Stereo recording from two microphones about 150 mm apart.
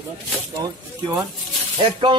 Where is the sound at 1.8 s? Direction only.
35° right (ahead or behind).